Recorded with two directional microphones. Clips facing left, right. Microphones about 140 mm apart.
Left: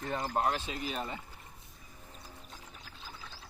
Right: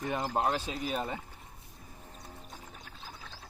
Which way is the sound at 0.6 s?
40° right (ahead or behind).